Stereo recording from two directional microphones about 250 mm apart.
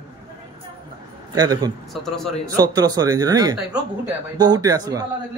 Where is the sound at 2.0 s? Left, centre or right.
Centre.